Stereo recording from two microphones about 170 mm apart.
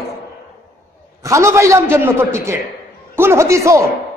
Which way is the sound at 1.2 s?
15° right (ahead or behind).